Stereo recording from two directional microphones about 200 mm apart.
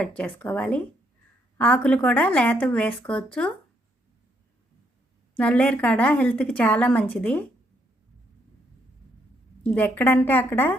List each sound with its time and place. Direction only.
0.0 s a woman's voice: 5° left (ahead or behind)
5.4 s a woman's voice: 5° left (ahead or behind)
9.7 s a woman's voice: 10° left (ahead or behind)